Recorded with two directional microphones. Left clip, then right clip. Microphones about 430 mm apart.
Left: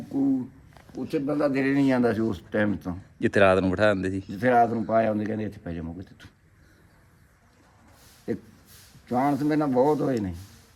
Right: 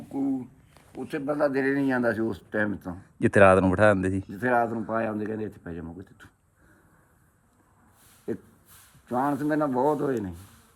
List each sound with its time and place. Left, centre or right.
0.1 s a sound: centre
0.9 s speech: centre
2.1 s speech: centre
3.2 s speech: centre
4.4 s speech: centre
9.0 s speech: centre